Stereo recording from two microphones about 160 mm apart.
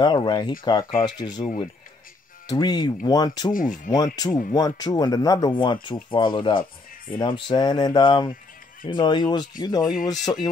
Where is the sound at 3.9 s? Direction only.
25° left (ahead or behind).